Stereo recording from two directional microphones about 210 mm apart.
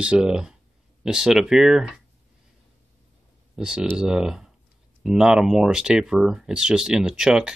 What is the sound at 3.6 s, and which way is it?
Speech, 5° right (ahead or behind).